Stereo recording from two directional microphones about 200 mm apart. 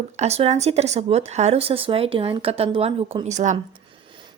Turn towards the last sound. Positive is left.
turn(degrees=-35)  # may be behind; listen again after turning